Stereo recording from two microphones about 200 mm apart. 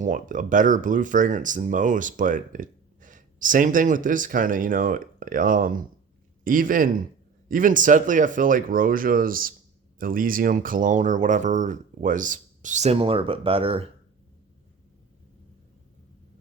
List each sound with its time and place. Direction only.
0.0 s speech: 40° right (ahead or behind)